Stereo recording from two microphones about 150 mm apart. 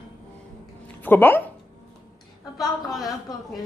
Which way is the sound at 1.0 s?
15° left (ahead or behind).